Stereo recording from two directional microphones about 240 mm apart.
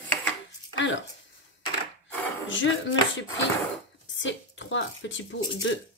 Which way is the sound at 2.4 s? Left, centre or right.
Left.